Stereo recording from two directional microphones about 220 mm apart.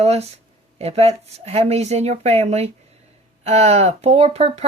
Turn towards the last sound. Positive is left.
turn(degrees=-30)  # may be behind; listen again after turning